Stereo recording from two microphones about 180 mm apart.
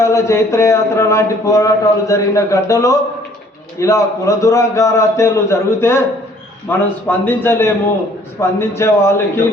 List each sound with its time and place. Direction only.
0.0 s a man's voice: 15° left (ahead or behind)